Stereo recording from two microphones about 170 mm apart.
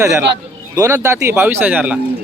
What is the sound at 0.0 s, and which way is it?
Speech, 15° right (ahead or behind).